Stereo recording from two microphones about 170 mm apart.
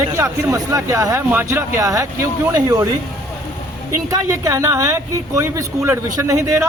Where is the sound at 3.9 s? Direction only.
20° right (ahead or behind).